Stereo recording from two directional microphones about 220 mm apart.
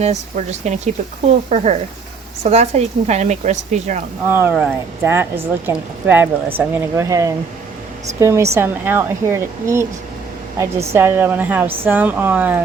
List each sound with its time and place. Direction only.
0.0 s speech: 30° right (ahead or behind)
4.3 s speech: 10° right (ahead or behind)